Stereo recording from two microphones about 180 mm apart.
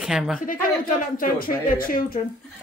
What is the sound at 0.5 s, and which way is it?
A woman's voice, 50° left (ahead or behind).